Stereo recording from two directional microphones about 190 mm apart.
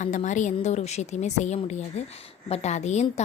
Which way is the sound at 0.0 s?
40° left (ahead or behind).